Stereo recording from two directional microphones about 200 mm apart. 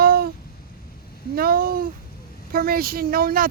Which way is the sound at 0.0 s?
50° right (ahead or behind).